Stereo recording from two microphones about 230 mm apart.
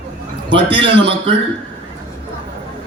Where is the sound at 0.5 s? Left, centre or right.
Right.